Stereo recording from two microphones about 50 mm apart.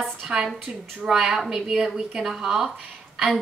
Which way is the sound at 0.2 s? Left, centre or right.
Centre.